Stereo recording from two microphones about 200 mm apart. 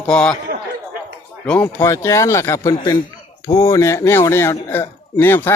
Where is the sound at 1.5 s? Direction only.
10° left (ahead or behind).